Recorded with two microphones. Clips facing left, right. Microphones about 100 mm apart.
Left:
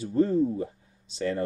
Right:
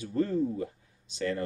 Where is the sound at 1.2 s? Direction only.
30° left (ahead or behind).